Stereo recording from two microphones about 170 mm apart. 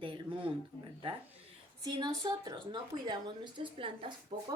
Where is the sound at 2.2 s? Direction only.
25° right (ahead or behind).